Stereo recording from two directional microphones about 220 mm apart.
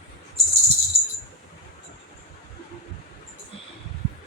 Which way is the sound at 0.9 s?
30° right (ahead or behind).